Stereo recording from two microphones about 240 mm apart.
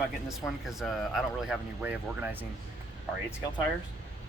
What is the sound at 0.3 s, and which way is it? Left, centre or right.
Speech, centre.